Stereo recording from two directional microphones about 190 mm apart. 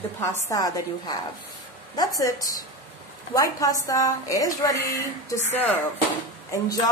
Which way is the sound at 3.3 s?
20° left (ahead or behind).